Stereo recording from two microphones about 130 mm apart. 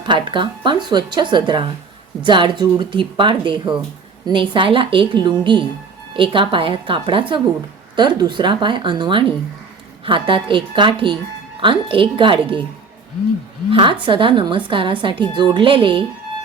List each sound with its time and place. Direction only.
0.0 s speech: 35° right (ahead or behind)
14.0 s speech: 40° right (ahead or behind)